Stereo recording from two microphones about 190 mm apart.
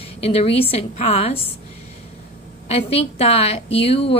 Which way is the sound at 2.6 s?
35° left (ahead or behind).